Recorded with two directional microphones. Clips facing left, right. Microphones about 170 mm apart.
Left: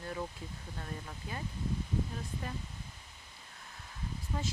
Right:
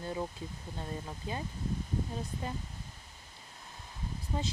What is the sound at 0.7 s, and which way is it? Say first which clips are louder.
Speech: right 4 dB; 25° right (ahead or behind).